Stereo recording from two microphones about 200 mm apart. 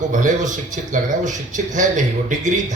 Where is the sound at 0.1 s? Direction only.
40° right (ahead or behind).